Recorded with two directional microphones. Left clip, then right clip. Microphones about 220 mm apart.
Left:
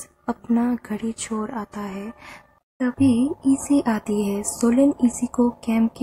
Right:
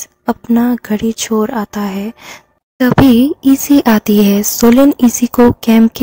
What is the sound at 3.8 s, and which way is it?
A woman's voice, 40° right (ahead or behind).